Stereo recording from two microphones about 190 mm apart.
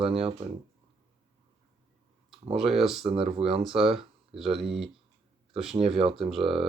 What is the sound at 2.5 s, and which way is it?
Speech, 30° right (ahead or behind).